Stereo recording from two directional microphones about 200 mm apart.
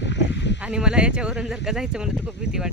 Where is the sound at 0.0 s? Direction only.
60° left (ahead or behind).